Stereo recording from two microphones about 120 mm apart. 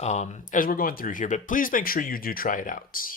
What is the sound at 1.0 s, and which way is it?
Speech, 90° left.